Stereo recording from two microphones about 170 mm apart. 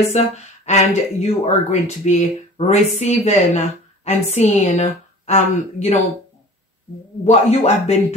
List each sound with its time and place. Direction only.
0.2 s speech: 40° left (ahead or behind)
7.2 s speech: 40° left (ahead or behind)